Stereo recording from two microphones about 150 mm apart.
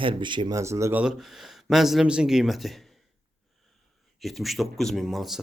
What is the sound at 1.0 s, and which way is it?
Speech, centre (ahead or behind).